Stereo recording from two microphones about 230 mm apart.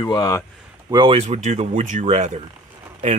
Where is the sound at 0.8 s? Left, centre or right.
Right.